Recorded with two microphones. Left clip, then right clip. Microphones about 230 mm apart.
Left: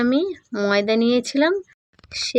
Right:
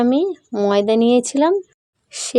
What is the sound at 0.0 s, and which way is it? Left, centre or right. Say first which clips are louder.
Speech: right 3 dB; centre.